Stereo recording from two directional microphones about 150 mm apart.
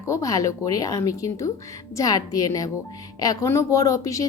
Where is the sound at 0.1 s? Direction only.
20° left (ahead or behind).